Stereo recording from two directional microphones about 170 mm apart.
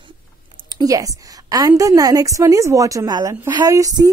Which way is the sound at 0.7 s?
20° right (ahead or behind).